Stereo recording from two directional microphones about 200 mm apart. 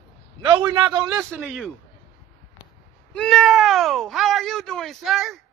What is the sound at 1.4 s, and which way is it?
Speech, centre (ahead or behind).